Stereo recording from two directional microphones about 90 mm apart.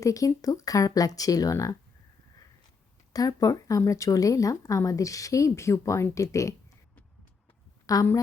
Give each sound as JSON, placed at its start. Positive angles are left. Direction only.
{"t": 0.0, "sound": "speech", "side_deg": 40}
{"t": 3.1, "sound": "speech", "side_deg": 45}
{"t": 7.9, "sound": "speech", "side_deg": 40}